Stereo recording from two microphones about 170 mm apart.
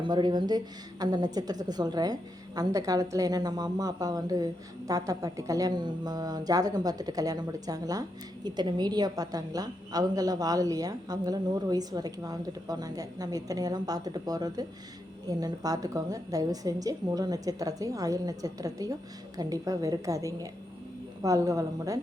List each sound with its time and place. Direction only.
0.0 s a woman's voice: 25° right (ahead or behind)